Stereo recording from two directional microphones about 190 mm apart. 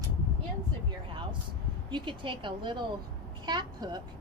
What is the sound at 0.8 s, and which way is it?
A woman's voice, 25° right (ahead or behind).